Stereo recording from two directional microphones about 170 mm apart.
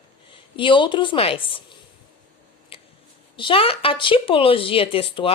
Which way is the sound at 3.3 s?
30° left (ahead or behind).